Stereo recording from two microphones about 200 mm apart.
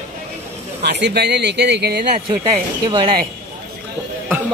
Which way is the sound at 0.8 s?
55° right (ahead or behind).